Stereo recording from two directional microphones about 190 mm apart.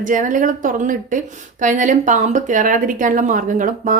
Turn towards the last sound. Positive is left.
turn(degrees=-45)  # may be behind; listen again after turning